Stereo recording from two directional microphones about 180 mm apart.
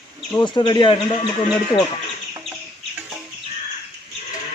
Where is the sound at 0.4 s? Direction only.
25° left (ahead or behind).